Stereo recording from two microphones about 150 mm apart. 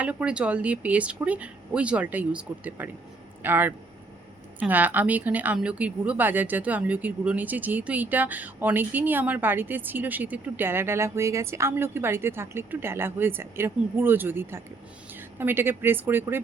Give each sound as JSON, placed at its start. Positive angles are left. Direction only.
{"t": 0.0, "sound": "speech", "side_deg": -10}